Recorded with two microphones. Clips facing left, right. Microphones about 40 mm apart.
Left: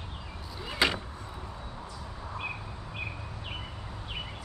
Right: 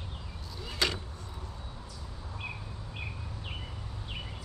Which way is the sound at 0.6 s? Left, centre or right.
Centre.